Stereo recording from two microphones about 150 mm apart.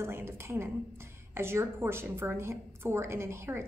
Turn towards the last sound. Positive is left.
turn(degrees=-15)  # may be behind; listen again after turning